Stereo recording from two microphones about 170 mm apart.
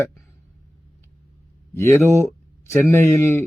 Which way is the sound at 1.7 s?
15° left (ahead or behind).